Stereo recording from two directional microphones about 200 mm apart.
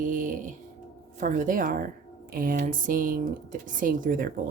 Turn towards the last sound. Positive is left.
turn(degrees=-45)  # may be behind; listen again after turning